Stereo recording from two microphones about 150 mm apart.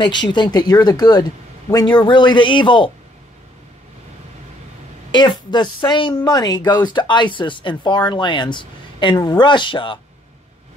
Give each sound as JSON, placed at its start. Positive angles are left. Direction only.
{"t": 0.0, "sound": "a woman's voice", "side_deg": 30}
{"t": 5.1, "sound": "a woman's voice", "side_deg": 30}